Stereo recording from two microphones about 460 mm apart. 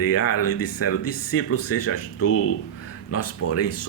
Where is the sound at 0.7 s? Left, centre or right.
Left.